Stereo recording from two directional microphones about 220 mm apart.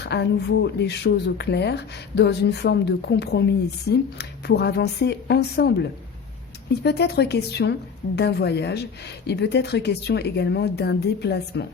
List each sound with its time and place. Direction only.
0.0 s a woman's voice: 50° left (ahead or behind)
6.8 s a woman's voice: 50° left (ahead or behind)